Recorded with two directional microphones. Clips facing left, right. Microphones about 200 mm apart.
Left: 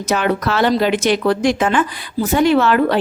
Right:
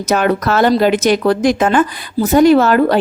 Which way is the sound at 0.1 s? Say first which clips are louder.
Right 3 dB; 45° right (ahead or behind).